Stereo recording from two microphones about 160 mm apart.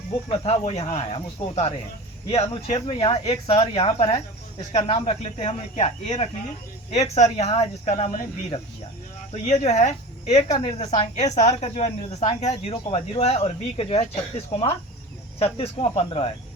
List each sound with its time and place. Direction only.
0.3 s speech: 40° left (ahead or behind)